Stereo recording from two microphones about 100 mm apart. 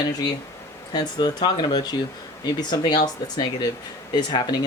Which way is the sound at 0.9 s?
45° left (ahead or behind).